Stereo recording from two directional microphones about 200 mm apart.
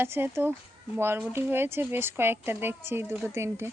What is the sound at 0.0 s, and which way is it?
Speech, 10° right (ahead or behind).